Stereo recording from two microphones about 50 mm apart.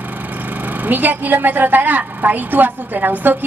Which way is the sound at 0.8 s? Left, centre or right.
Right.